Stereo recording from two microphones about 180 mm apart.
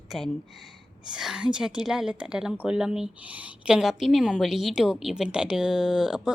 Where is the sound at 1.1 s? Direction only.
5° right (ahead or behind).